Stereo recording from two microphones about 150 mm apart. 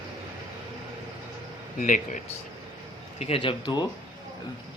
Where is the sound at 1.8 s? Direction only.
60° left (ahead or behind).